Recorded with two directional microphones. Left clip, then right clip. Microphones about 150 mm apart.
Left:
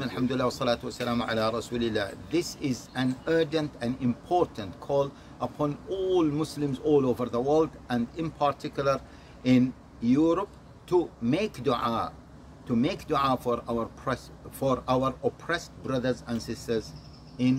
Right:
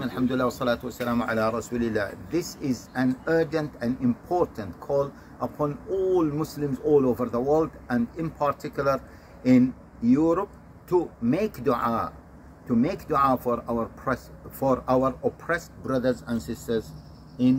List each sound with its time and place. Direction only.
0.0 s a man's voice: 10° left (ahead or behind)
2.4 s speech: 30° left (ahead or behind)
2.9 s a man's voice: 5° left (ahead or behind)